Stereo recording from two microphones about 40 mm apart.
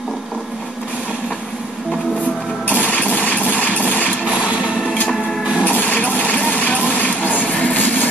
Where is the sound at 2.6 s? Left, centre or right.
Left.